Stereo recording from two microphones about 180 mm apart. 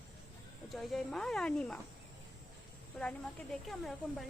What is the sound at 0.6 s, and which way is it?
Speech, centre (ahead or behind).